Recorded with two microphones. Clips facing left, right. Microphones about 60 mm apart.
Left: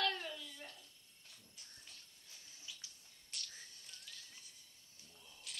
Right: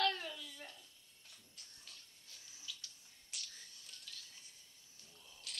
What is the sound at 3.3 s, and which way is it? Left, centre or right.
Whispering, centre.